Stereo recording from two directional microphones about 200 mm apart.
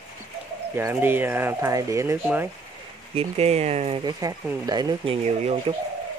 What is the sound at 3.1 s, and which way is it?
Speech, 30° right (ahead or behind).